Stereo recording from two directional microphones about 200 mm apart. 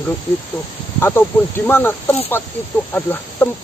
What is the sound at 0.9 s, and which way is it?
Speech, 10° left (ahead or behind).